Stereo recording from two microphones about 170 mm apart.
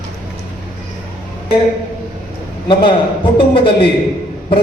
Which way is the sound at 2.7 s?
30° left (ahead or behind).